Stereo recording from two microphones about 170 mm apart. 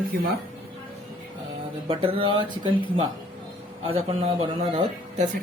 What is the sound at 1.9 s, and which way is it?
Speech, 30° right (ahead or behind).